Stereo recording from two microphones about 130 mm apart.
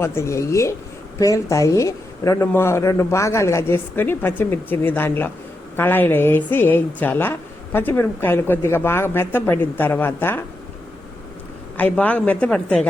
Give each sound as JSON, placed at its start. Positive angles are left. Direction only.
{"t": 0.0, "sound": "a woman's voice", "side_deg": 20}
{"t": 11.8, "sound": "a woman's voice", "side_deg": 10}